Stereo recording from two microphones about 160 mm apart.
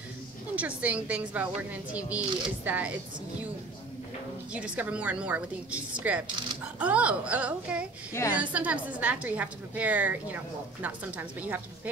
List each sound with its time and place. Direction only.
0.6 s a woman's voice: 10° right (ahead or behind)
4.6 s a woman's voice: 10° right (ahead or behind)
8.1 s a woman's voice: 15° left (ahead or behind)
8.4 s a woman's voice: 10° right (ahead or behind)